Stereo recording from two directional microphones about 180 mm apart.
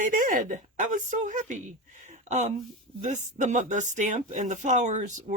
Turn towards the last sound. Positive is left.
turn(degrees=-45)  # may be behind; listen again after turning